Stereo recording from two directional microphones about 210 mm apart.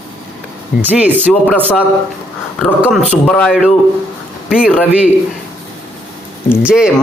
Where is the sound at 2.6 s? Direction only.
Centre (ahead or behind).